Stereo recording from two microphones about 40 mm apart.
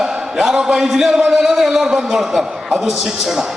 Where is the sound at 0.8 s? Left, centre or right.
Centre.